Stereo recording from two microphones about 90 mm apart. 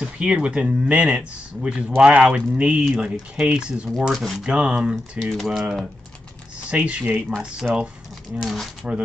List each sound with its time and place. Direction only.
0.0 s speech: 10° right (ahead or behind)
4.1 s speech: centre (ahead or behind)
4.4 s speech: 10° right (ahead or behind)
6.7 s speech: 15° right (ahead or behind)